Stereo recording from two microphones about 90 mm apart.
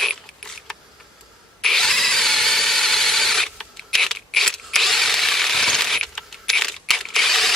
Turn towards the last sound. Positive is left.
turn(degrees=0)  # may be behind; listen again after turning